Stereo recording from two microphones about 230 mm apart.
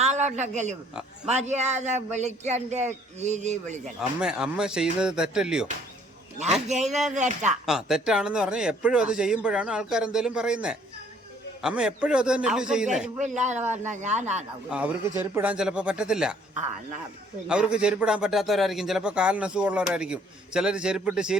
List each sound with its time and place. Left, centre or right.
0.0 s a man's voice: right
3.8 s a man's voice: centre
6.7 s speech: right
7.6 s a man's voice: centre
13.1 s speech: right
14.7 s a man's voice: centre
17.5 s a man's voice: centre